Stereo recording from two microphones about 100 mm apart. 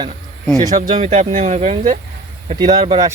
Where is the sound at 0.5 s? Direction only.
40° right (ahead or behind).